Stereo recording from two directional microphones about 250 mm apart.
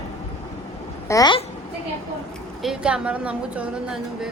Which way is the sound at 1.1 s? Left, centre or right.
Centre.